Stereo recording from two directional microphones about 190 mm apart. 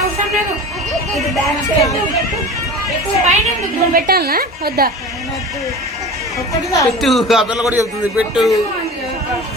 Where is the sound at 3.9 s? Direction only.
55° right (ahead or behind).